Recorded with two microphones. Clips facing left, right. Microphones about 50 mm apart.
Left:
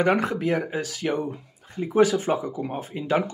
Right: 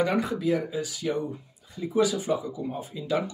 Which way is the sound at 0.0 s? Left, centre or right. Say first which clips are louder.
Left 3 dB; left.